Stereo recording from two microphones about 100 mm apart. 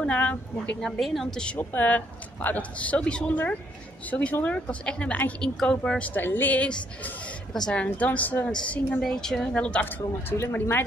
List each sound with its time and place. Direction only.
0.0 s a woman's voice: 15° left (ahead or behind)
10.3 s speech: 25° left (ahead or behind)